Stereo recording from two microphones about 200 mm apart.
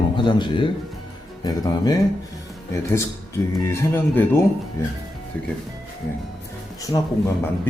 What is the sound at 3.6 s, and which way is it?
Speech, 15° left (ahead or behind).